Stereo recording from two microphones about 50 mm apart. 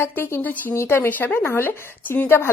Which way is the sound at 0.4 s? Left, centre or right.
Left.